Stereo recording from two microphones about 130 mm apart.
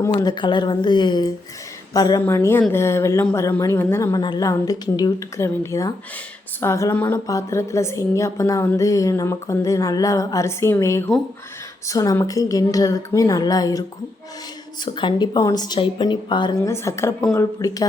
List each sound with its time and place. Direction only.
0.2 s a woman's voice: 35° left (ahead or behind)
14.8 s a woman's voice: 40° left (ahead or behind)
16.6 s a woman's voice: 20° left (ahead or behind)